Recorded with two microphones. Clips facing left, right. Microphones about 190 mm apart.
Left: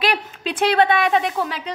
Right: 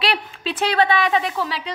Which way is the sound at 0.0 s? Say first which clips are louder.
Left 1 dB; 45° left (ahead or behind).